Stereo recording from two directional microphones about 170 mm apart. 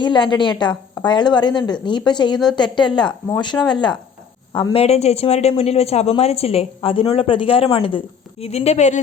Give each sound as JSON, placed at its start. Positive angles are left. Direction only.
{"t": 0.0, "sound": "a woman's voice", "side_deg": 25}